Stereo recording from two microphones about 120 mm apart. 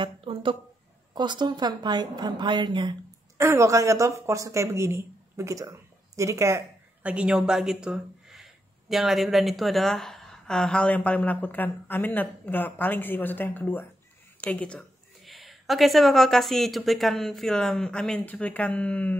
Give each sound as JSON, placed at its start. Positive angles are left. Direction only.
{"t": 0.0, "sound": "a woman's voice", "side_deg": -50}
{"t": 3.3, "sound": "speech", "side_deg": -25}
{"t": 7.0, "sound": "speech", "side_deg": -10}